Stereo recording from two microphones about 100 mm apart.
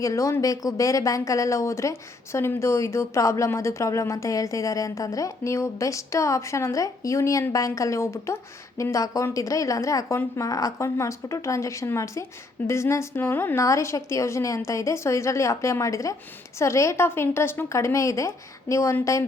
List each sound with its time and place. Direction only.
0.0 s a woman's voice: 35° left (ahead or behind)
13.7 s a woman's voice: 30° left (ahead or behind)